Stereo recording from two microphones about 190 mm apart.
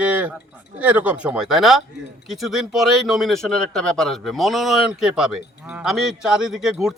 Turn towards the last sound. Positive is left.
turn(degrees=-5)  # may be behind; listen again after turning